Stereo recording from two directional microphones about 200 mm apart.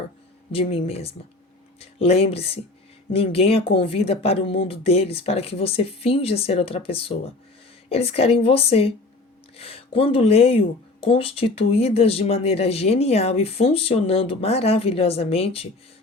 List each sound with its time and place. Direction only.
0.5 s speech: 30° left (ahead or behind)